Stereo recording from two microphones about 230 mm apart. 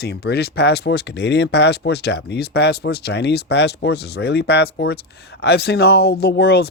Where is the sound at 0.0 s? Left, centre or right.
Left.